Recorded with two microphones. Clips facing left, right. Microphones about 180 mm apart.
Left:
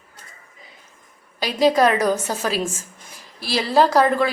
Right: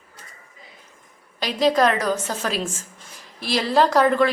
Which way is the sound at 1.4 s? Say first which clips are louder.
Left 2 dB; 5° left (ahead or behind).